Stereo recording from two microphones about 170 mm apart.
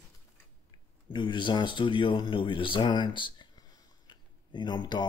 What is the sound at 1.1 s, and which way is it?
Speech, 25° left (ahead or behind).